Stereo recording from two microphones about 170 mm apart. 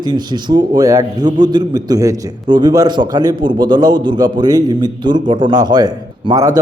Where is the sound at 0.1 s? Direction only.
25° right (ahead or behind).